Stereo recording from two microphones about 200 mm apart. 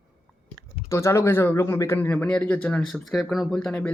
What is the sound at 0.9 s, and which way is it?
Speech, 15° left (ahead or behind).